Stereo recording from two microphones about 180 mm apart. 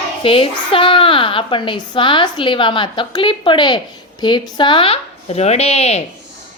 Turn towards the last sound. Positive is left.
turn(degrees=35)  # may be behind; listen again after turning